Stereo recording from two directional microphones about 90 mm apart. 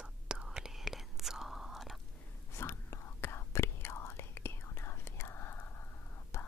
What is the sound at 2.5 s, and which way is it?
Whispering, 30° left (ahead or behind).